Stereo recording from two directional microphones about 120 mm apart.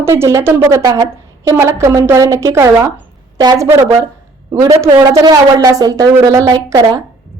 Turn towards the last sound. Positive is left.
turn(degrees=-30)  # may be behind; listen again after turning